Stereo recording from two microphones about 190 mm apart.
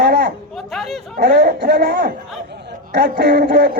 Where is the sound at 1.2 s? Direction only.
60° right (ahead or behind).